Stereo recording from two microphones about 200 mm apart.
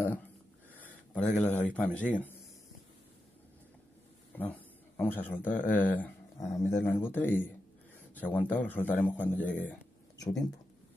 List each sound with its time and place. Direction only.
0.7 s a sound: 10° left (ahead or behind)
1.7 s a man's voice: 5° left (ahead or behind)
4.4 s a man's voice: 10° left (ahead or behind)